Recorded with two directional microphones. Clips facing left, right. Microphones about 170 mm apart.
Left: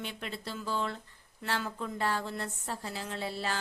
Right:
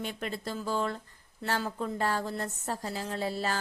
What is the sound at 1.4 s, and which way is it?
Speech, 40° right (ahead or behind).